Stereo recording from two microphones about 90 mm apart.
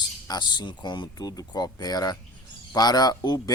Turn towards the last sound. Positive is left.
turn(degrees=45)  # may be behind; listen again after turning